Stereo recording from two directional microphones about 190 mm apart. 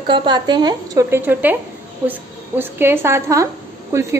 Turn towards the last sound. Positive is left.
turn(degrees=-15)  # may be behind; listen again after turning